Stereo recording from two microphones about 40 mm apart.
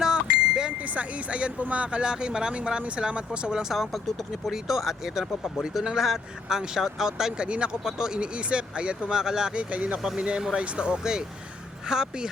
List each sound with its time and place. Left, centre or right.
0.0 s vehicle: centre
0.8 s speech: right
3.7 s speech: centre
6.0 s speech: centre
7.4 s speech: right
7.9 s speech: centre
8.2 s speech: right
9.6 s speech: right
10.2 s speech: right